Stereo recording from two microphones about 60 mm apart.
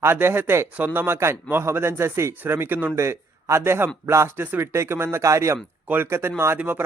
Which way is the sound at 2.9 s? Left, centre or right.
Right.